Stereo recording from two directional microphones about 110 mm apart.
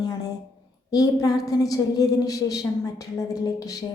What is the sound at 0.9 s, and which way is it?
A woman's voice, 35° left (ahead or behind).